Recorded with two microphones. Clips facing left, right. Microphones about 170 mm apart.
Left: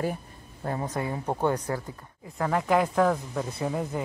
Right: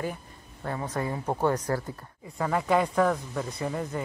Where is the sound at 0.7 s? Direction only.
30° left (ahead or behind).